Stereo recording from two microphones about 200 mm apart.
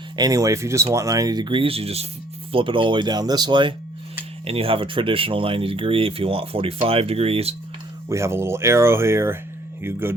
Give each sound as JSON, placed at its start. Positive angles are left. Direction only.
{"t": 0.2, "sound": "speech", "side_deg": -15}
{"t": 8.1, "sound": "speech", "side_deg": -15}